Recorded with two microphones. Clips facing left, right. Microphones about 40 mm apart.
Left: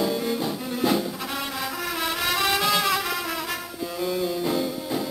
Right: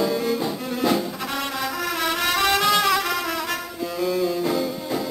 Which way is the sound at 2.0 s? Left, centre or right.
Centre.